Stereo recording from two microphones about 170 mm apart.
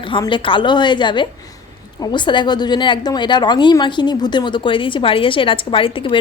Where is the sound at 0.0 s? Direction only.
30° left (ahead or behind).